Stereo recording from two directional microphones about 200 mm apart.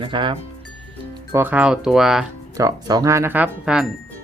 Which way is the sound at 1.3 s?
10° right (ahead or behind).